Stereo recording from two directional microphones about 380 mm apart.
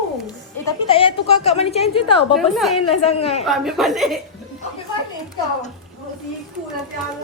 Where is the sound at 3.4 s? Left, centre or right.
Centre.